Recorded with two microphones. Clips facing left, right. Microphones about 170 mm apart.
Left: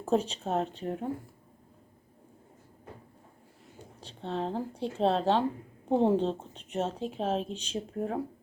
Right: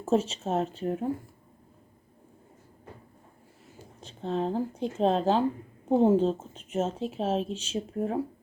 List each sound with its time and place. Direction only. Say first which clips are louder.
0.1 s a woman's voice: right 2 dB; 5° right (ahead or behind)
4.2 s a woman's voice: right 4 dB; centre (ahead or behind)
4.8 s speech: right 2 dB; 35° left (ahead or behind)
5.1 s a woman's voice: right 2 dB; centre (ahead or behind)